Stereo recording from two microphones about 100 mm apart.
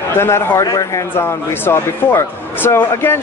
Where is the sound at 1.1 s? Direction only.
25° left (ahead or behind).